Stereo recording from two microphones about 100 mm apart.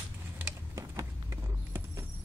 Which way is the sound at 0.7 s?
30° right (ahead or behind).